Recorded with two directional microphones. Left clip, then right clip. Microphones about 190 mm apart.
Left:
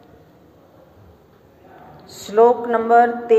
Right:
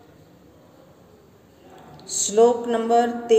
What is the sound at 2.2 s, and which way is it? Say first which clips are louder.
A woman's voice: left 3 dB; 30° right (ahead or behind).